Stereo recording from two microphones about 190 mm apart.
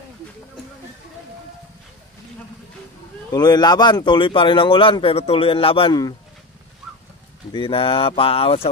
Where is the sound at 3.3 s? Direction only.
20° left (ahead or behind).